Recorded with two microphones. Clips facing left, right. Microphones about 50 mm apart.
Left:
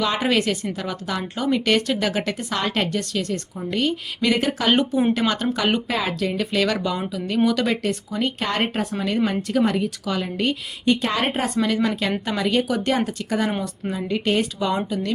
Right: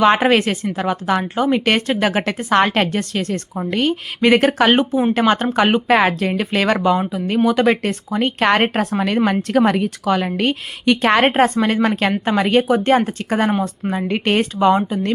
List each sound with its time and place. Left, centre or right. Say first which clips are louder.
0.0 s a woman's voice: right 7 dB; right
5.1 s speech: right 6 dB; right
8.4 s a woman's voice: right 8 dB; right
12.6 s a woman's voice: right 7 dB; right